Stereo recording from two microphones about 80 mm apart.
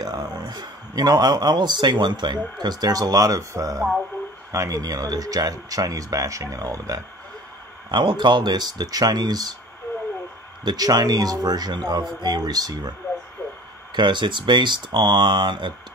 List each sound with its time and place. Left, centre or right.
0.0 s speech: right
7.9 s speech: right
10.6 s speech: right
13.9 s speech: right